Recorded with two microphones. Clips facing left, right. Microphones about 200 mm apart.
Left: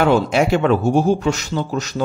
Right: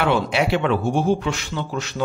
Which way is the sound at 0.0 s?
45° left (ahead or behind).